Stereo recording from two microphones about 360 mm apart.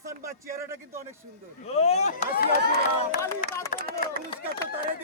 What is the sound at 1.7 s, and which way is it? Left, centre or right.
Speech, centre.